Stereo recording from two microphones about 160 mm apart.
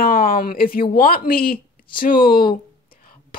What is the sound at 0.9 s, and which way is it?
Speech, 65° left (ahead or behind).